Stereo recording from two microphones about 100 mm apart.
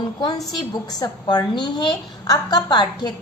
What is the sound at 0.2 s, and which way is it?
A woman's voice, 45° left (ahead or behind).